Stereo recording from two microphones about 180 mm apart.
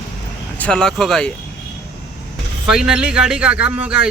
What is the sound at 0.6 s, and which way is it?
Speech, 5° left (ahead or behind).